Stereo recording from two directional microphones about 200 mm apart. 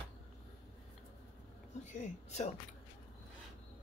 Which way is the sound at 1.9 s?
35° left (ahead or behind).